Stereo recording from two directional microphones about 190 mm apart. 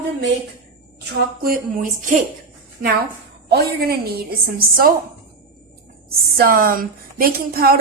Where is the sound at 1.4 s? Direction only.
45° right (ahead or behind).